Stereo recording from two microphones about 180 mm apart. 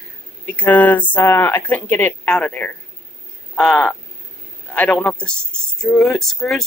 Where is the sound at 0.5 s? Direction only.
10° left (ahead or behind).